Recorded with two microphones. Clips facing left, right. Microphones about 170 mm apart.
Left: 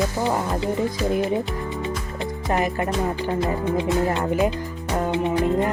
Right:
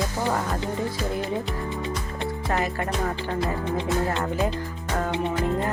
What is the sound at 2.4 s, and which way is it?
Music, 20° left (ahead or behind).